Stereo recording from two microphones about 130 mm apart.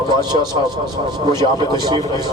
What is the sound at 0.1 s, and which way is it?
A man's voice, 35° right (ahead or behind).